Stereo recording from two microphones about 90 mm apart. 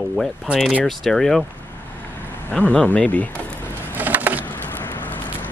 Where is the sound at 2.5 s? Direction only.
10° left (ahead or behind).